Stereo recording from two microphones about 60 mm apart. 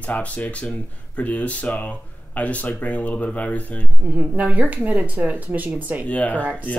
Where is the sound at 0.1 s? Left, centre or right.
Left.